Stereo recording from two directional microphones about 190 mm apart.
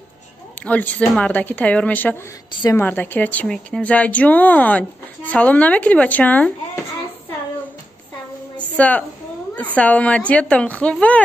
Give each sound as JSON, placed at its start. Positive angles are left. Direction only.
{"t": 0.6, "sound": "speech", "side_deg": 10}
{"t": 2.5, "sound": "a woman's voice", "side_deg": 20}
{"t": 2.8, "sound": "speech", "side_deg": 10}
{"t": 8.5, "sound": "a sound", "side_deg": 5}
{"t": 9.8, "sound": "speech", "side_deg": 5}